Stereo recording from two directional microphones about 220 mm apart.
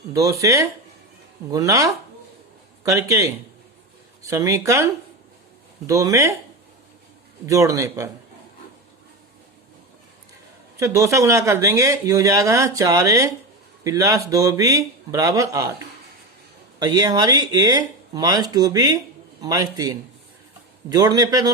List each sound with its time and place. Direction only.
0.1 s speech: 15° right (ahead or behind)
7.4 s speech: 15° right (ahead or behind)
10.8 s speech: 15° right (ahead or behind)
16.8 s speech: 15° right (ahead or behind)